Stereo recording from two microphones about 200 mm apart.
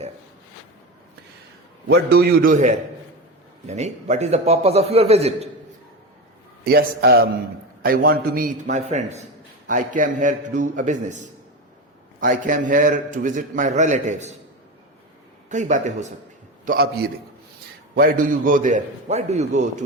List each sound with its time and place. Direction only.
1.9 s a man's voice: 50° right (ahead or behind); by 5.5 s 30° right (ahead or behind)
6.7 s a man's voice: 50° right (ahead or behind)
15.4 s a man's voice: 35° right (ahead or behind)
16.6 s a man's voice: 50° right (ahead or behind); by 19.8 s 35° right (ahead or behind)